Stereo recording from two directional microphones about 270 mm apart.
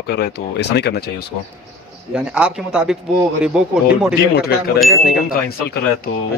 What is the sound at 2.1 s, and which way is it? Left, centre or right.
Speech, centre.